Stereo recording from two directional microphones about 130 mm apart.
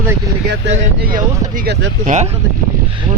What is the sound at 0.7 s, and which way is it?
Speech, 90° right.